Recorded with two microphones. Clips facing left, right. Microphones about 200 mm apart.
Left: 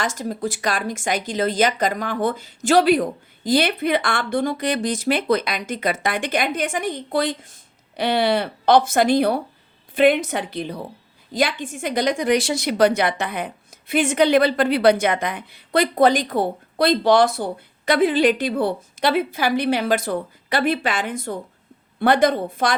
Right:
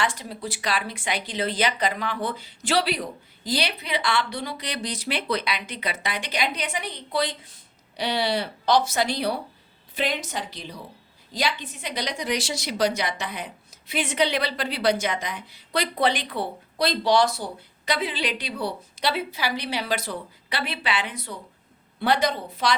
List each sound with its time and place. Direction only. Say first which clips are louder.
0.0 s a woman's voice: left 4 dB; 45° left (ahead or behind)